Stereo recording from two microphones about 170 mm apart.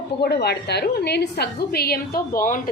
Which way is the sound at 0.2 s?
70° left (ahead or behind).